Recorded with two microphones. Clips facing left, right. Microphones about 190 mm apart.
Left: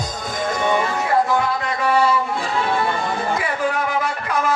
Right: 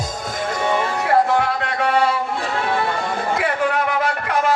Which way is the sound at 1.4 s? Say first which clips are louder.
Right 1 dB; 65° right (ahead or behind).